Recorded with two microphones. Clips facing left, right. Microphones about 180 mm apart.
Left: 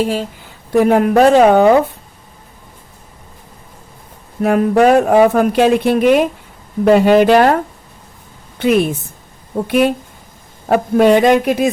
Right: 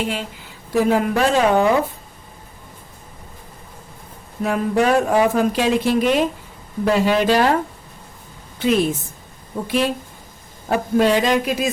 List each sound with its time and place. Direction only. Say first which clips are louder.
0.0 s speech: left 7 dB; 40° left (ahead or behind)
0.7 s speech: left 6 dB; 60° left (ahead or behind)
4.4 s speech: left 7 dB; 60° left (ahead or behind)
8.5 s a woman's voice: left 4 dB; 60° left (ahead or behind)